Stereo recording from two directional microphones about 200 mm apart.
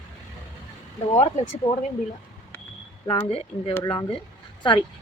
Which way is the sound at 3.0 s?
25° left (ahead or behind).